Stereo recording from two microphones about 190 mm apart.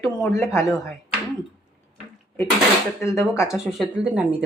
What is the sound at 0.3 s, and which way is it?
Speech, 15° left (ahead or behind).